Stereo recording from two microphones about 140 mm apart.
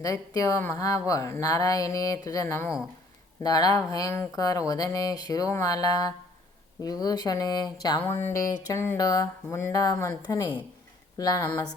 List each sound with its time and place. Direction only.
0.0 s speech: 25° left (ahead or behind)